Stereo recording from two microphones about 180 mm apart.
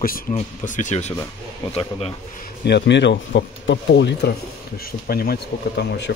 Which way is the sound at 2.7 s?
75° left (ahead or behind).